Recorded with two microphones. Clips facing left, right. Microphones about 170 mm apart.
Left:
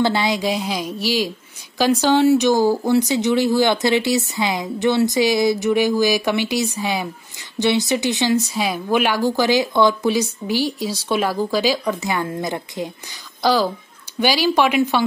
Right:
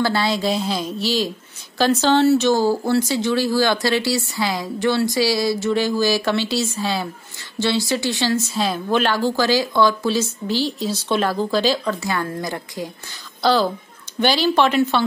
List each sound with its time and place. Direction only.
0.0 s speech: 20° left (ahead or behind)